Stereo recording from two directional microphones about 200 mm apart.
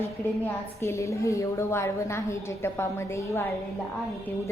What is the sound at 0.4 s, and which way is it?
A woman's voice, 15° left (ahead or behind).